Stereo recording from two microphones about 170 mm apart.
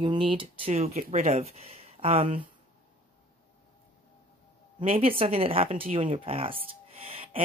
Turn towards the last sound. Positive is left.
turn(degrees=-35)  # may be behind; listen again after turning